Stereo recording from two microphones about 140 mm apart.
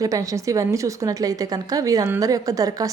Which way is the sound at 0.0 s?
25° right (ahead or behind).